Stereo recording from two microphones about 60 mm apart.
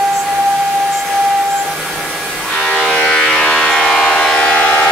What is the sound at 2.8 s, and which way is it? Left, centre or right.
Train, centre.